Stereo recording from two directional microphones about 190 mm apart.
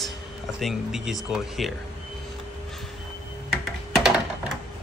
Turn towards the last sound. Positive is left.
turn(degrees=-5)  # may be behind; listen again after turning